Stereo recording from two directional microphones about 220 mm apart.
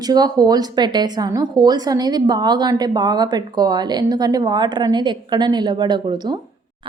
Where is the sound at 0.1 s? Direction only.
15° right (ahead or behind).